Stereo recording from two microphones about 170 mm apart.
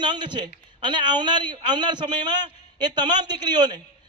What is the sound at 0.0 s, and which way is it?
A man's voice, 25° right (ahead or behind).